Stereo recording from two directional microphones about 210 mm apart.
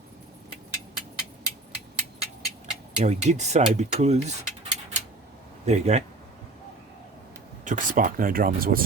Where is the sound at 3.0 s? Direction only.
35° right (ahead or behind).